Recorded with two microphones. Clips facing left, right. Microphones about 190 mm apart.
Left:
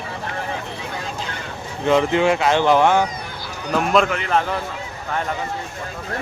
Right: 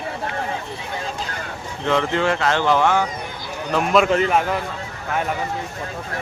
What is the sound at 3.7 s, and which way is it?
Speech, centre (ahead or behind).